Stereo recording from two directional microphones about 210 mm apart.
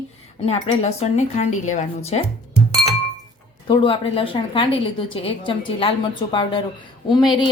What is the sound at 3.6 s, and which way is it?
A woman's voice, 25° left (ahead or behind).